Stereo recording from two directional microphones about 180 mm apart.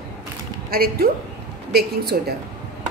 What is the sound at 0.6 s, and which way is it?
A woman's voice, 55° right (ahead or behind).